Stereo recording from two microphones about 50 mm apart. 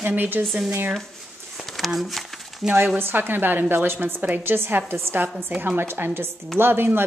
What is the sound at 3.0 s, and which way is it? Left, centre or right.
A woman's voice, right.